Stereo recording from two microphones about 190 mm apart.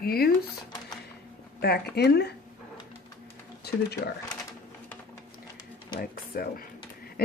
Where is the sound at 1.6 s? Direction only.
55° left (ahead or behind).